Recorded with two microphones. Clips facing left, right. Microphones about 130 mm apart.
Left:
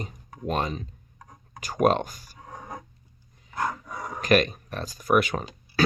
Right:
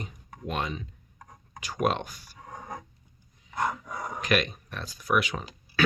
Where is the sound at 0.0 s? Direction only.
40° left (ahead or behind).